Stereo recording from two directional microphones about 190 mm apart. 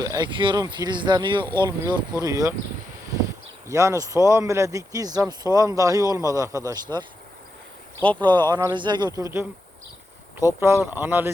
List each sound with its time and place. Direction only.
0.0 s speech: 20° right (ahead or behind)
3.7 s speech: 15° right (ahead or behind)
8.2 s speech: 25° right (ahead or behind)
10.6 s speech: 15° right (ahead or behind)